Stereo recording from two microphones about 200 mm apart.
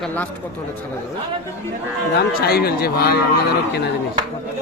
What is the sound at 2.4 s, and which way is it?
Speech, 50° left (ahead or behind).